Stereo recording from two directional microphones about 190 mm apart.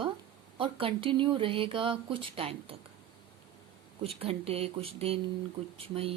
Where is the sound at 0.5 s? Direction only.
25° right (ahead or behind).